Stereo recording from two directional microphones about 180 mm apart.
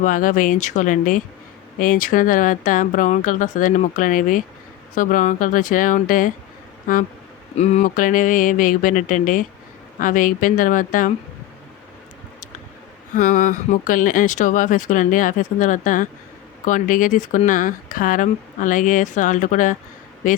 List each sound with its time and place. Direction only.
0.0 s speech: 50° left (ahead or behind)
7.5 s speech: 35° left (ahead or behind)
13.1 s speech: 45° left (ahead or behind)